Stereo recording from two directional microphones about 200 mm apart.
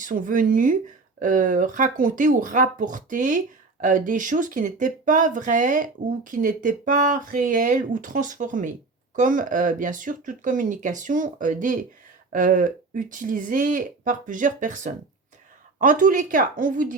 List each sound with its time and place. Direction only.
0.0 s speech: 40° right (ahead or behind)